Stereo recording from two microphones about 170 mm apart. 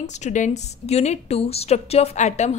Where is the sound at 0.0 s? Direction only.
45° left (ahead or behind).